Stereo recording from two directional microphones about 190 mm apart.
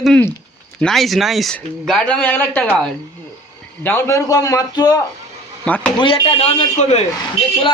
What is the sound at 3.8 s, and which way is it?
A man's voice, 10° left (ahead or behind).